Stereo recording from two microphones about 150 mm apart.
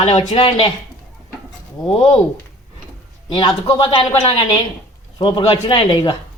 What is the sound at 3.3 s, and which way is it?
Speech, 30° left (ahead or behind).